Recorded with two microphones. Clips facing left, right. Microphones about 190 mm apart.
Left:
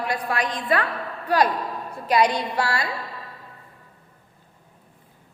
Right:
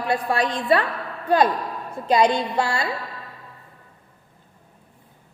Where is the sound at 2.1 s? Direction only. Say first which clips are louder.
Right 2 dB; 25° right (ahead or behind).